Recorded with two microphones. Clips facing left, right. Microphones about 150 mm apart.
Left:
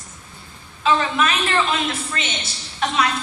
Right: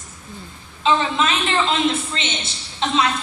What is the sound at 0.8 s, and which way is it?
A woman's voice, 25° right (ahead or behind).